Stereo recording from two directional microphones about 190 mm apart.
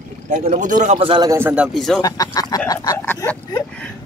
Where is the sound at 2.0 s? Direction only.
20° left (ahead or behind).